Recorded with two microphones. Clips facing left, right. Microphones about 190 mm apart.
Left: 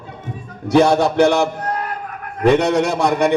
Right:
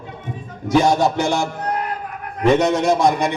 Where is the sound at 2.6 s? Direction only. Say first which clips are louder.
Even; 60° left (ahead or behind).